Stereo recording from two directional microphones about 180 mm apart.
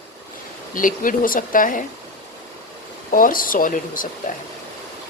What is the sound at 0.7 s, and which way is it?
Speech, 50° left (ahead or behind).